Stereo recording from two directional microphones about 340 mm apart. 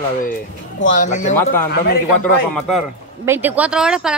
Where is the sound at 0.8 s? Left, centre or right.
Left.